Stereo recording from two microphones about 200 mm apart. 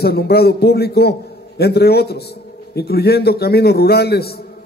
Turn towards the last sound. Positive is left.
turn(degrees=55)  # may be behind; listen again after turning